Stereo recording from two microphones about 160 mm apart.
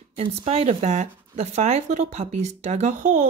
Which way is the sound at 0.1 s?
35° right (ahead or behind).